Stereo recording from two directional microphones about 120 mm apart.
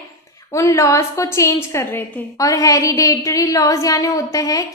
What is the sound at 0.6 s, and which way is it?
A woman's voice, 25° left (ahead or behind).